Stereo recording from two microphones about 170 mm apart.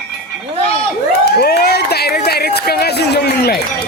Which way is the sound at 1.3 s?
70° left (ahead or behind).